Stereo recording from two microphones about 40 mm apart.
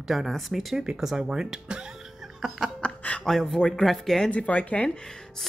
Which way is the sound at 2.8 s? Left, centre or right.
Left.